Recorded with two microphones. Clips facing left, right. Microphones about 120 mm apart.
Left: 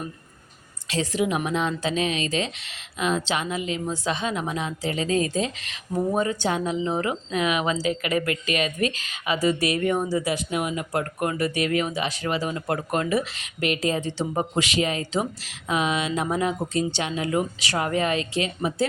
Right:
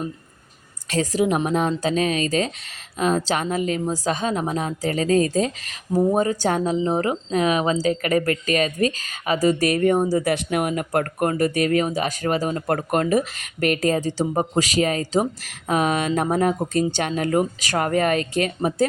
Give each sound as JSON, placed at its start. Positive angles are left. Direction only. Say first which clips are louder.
{"t": 0.9, "sound": "speech", "louder": "right 4 dB", "side_deg": -40}
{"t": 10.3, "sound": "speech", "louder": "right 4 dB", "side_deg": -55}